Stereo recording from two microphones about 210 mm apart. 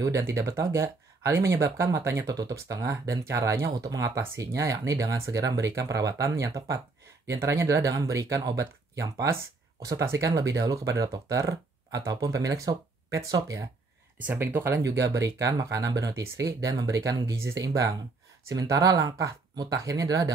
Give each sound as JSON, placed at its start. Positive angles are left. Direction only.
{"t": 0.0, "sound": "speech", "side_deg": -15}